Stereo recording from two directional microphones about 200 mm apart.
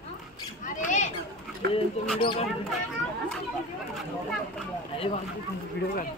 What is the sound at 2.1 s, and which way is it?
Speech, 25° left (ahead or behind).